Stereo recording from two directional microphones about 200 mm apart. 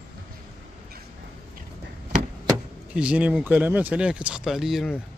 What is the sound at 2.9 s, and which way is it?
Speech, 5° right (ahead or behind).